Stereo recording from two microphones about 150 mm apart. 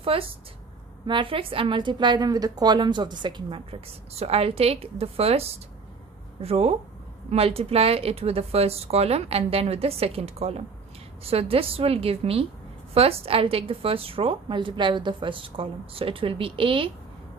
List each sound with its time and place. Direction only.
0.0 s a woman's voice: 40° right (ahead or behind)